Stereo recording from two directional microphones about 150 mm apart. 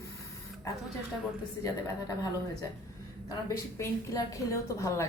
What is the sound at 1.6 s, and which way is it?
A woman's voice, 25° left (ahead or behind).